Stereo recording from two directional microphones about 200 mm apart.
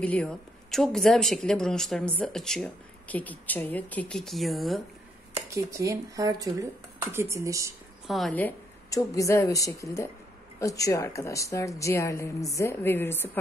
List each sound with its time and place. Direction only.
0.0 s speech: 5° left (ahead or behind)
5.5 s speech: 15° right (ahead or behind)
8.1 s a woman's voice: 5° left (ahead or behind)